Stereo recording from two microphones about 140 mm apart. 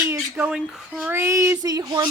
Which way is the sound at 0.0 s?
15° right (ahead or behind).